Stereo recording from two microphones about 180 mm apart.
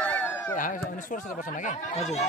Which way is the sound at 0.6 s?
45° left (ahead or behind).